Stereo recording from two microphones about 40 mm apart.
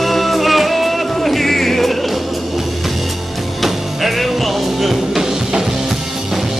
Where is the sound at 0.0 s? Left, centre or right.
Centre.